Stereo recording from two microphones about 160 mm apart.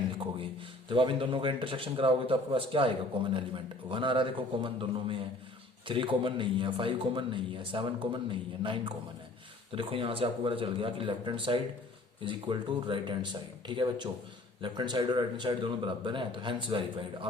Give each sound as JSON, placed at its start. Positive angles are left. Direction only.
{"t": 0.9, "sound": "a man's voice", "side_deg": -30}